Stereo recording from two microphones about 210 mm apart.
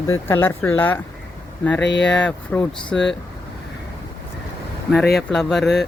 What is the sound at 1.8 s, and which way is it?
Speech, 55° left (ahead or behind).